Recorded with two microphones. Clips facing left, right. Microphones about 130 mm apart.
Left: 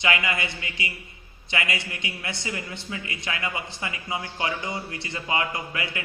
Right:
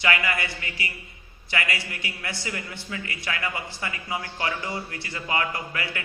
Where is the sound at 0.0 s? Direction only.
20° left (ahead or behind).